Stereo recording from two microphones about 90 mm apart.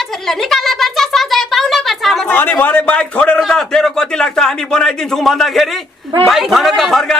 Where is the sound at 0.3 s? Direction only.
5° left (ahead or behind).